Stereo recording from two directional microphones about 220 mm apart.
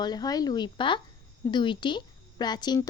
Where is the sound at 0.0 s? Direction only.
20° left (ahead or behind).